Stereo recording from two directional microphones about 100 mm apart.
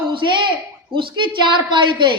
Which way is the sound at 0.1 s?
55° right (ahead or behind).